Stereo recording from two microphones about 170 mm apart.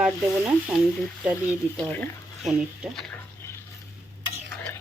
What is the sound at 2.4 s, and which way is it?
Speech, 5° right (ahead or behind).